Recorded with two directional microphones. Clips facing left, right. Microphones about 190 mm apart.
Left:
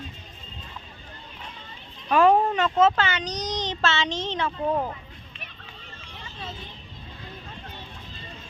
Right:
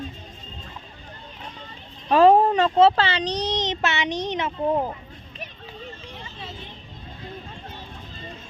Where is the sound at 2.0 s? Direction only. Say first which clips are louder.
Right 4 dB; 35° right (ahead or behind).